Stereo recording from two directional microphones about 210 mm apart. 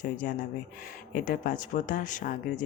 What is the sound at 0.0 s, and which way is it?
Speech, 40° left (ahead or behind).